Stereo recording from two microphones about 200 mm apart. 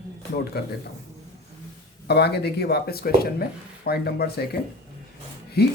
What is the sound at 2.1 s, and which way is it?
Speech, 55° left (ahead or behind).